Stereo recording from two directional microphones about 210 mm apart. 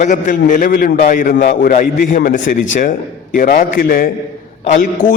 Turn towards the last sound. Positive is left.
turn(degrees=35)  # may be behind; listen again after turning